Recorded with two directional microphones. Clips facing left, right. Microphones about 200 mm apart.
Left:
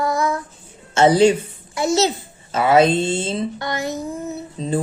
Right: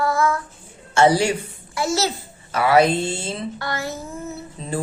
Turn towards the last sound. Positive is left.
turn(degrees=20)  # may be behind; listen again after turning